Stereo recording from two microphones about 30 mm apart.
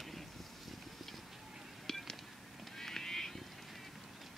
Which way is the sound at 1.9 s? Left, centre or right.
Centre.